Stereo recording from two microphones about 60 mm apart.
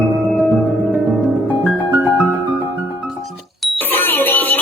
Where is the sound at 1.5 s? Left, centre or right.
Right.